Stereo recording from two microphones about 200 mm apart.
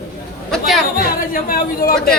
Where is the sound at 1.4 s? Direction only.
45° left (ahead or behind).